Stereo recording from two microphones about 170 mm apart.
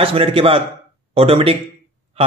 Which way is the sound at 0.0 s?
35° right (ahead or behind).